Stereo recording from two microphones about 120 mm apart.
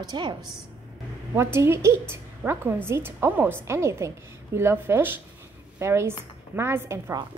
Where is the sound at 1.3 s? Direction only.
20° right (ahead or behind).